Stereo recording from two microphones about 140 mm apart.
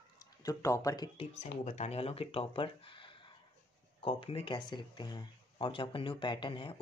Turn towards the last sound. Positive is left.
turn(degrees=35)  # may be behind; listen again after turning